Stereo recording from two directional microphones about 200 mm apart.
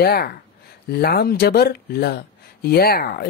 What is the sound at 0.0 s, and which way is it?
Speech, 50° left (ahead or behind).